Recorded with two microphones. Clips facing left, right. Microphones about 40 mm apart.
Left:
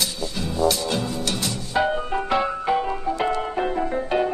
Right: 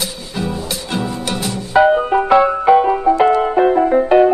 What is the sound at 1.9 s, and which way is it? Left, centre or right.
Music, right.